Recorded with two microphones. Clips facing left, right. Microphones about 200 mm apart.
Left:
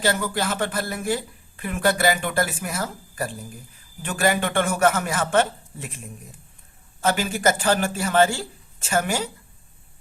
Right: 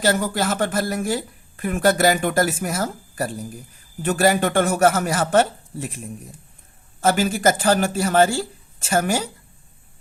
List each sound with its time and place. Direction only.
0.0 s a man's voice: 45° right (ahead or behind)
7.0 s a man's voice: 40° right (ahead or behind)